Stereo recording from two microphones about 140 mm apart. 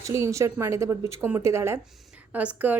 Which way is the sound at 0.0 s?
20° right (ahead or behind).